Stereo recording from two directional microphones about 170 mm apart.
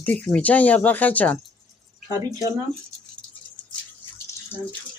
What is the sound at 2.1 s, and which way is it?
Speech, 20° right (ahead or behind).